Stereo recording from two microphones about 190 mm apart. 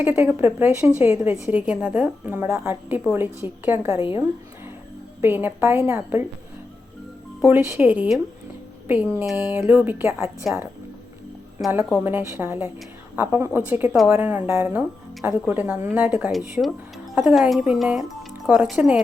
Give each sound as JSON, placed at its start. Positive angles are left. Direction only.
{"t": 0.0, "sound": "speech", "side_deg": -10}
{"t": 3.9, "sound": "a woman's voice", "side_deg": 30}
{"t": 5.2, "sound": "speech", "side_deg": -10}
{"t": 7.4, "sound": "speech", "side_deg": -15}
{"t": 11.7, "sound": "speech", "side_deg": -10}